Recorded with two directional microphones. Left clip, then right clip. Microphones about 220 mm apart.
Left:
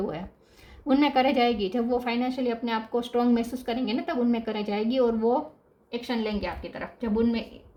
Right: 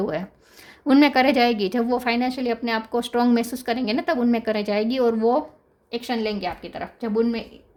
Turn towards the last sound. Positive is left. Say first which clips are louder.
# right 4 dB
turn(degrees=-55)  # may be behind; listen again after turning